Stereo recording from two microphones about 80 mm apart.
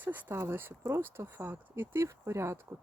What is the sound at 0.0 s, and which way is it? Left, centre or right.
Speech, right.